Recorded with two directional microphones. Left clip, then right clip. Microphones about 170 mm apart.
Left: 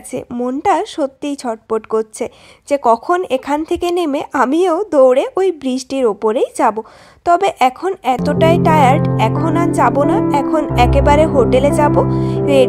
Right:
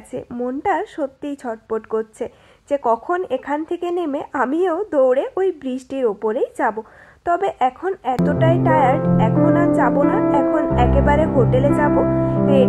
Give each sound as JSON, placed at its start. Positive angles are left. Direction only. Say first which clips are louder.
{"t": 0.3, "sound": "speech", "louder": "left 6 dB", "side_deg": 25}